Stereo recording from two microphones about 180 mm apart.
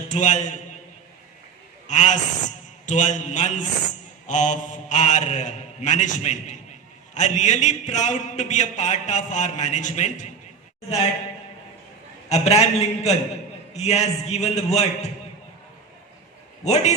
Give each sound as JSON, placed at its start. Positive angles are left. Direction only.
{"t": 0.1, "sound": "a man's voice", "side_deg": 45}
{"t": 1.9, "sound": "a man's voice", "side_deg": 40}
{"t": 12.3, "sound": "a man's voice", "side_deg": 35}
{"t": 16.6, "sound": "a man's voice", "side_deg": 40}